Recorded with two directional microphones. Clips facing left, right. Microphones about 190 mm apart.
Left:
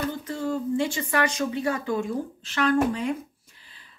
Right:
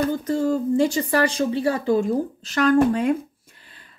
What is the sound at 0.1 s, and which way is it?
A woman's voice, 40° right (ahead or behind).